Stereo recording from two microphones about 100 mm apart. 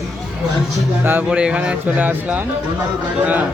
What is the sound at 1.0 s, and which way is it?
Speech, 20° right (ahead or behind).